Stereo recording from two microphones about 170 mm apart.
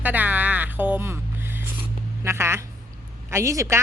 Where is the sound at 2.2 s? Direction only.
15° right (ahead or behind).